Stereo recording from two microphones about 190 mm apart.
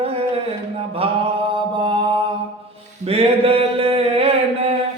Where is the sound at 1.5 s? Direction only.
25° right (ahead or behind).